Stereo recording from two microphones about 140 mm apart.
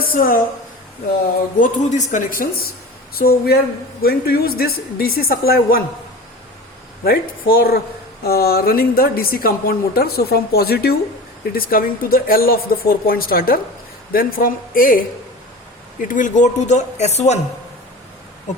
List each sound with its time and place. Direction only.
0.1 s a woman's voice: 85° left
1.5 s a woman's voice: 65° left (ahead or behind); by 5.8 s 90° left
7.0 s a woman's voice: 90° left
16.0 s speech: 70° left (ahead or behind); by 17.4 s 55° left (ahead or behind)